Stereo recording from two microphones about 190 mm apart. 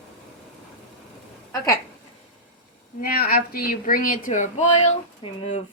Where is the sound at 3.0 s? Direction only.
50° left (ahead or behind); by 5.4 s 30° left (ahead or behind).